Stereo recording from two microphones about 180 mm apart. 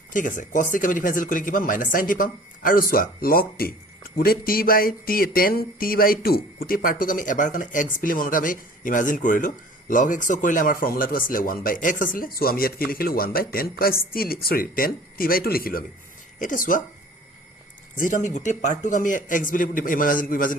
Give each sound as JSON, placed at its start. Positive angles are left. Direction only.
{"t": 0.1, "sound": "speech", "side_deg": 45}
{"t": 18.0, "sound": "speech", "side_deg": 45}